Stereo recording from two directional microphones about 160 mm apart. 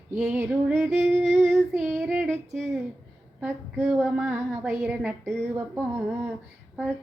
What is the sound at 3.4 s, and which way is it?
A woman's voice, 5° right (ahead or behind).